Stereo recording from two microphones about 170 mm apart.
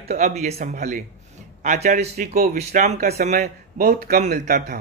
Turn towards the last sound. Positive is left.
turn(degrees=-45)  # may be behind; listen again after turning